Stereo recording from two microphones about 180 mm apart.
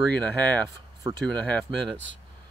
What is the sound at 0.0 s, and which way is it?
Speech, 10° left (ahead or behind).